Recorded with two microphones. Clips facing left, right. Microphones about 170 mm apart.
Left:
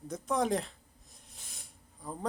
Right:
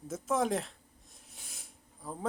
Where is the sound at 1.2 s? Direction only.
Centre (ahead or behind).